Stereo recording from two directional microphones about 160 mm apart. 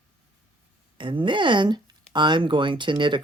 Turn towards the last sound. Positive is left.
turn(degrees=-30)  # may be behind; listen again after turning